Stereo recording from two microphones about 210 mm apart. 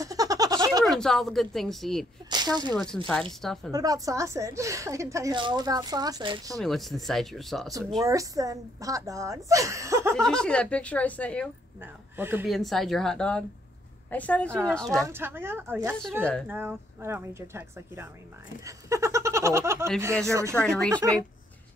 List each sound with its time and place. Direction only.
0.0 s a sound: 15° right (ahead or behind)
0.8 s a woman's voice: centre (ahead or behind)
2.2 s speech: 20° right (ahead or behind)
2.7 s a woman's voice: 5° left (ahead or behind)
3.7 s a woman's voice: 15° right (ahead or behind)
6.6 s a woman's voice: centre (ahead or behind)
8.1 s a woman's voice: 15° right (ahead or behind)
10.1 s a woman's voice: 5° left (ahead or behind)
11.8 s a woman's voice: 10° right (ahead or behind)
12.5 s a woman's voice: centre (ahead or behind)
15.0 s a woman's voice: 10° right (ahead or behind)
18.6 s giggle: 15° right (ahead or behind)
20.3 s a woman's voice: 15° right (ahead or behind)